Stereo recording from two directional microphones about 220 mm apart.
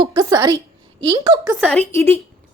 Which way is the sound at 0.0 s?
20° right (ahead or behind).